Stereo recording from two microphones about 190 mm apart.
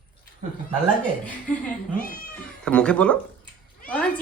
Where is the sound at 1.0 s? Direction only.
5° left (ahead or behind).